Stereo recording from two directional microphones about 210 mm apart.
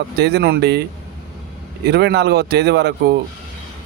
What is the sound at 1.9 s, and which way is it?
Speech, 50° right (ahead or behind).